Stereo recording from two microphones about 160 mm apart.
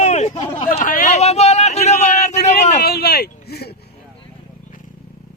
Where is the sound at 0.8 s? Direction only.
60° left (ahead or behind).